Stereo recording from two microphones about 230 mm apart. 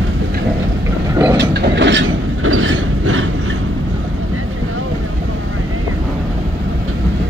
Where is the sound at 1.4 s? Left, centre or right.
Right.